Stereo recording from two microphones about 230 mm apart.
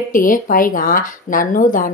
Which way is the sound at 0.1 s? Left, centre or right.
Left.